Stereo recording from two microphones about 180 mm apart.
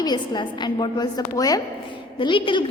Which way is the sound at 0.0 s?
25° left (ahead or behind).